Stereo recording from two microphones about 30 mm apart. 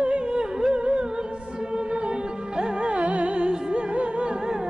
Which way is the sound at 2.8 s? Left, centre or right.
Right.